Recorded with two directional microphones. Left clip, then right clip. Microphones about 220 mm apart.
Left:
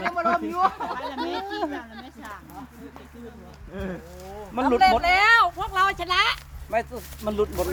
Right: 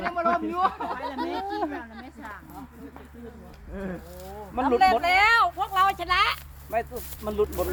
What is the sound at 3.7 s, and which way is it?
Speech, 50° left (ahead or behind).